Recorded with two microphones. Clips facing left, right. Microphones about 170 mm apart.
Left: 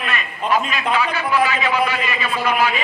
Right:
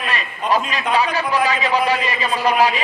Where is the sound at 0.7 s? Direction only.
35° right (ahead or behind).